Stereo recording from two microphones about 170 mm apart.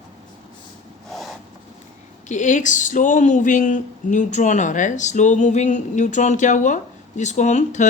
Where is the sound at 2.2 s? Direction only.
45° left (ahead or behind).